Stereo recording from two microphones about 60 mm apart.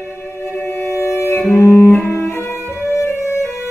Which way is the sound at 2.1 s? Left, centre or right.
Left.